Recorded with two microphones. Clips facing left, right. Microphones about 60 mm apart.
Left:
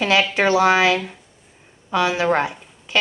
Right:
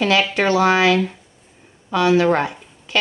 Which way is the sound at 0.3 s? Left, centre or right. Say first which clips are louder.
Even; centre.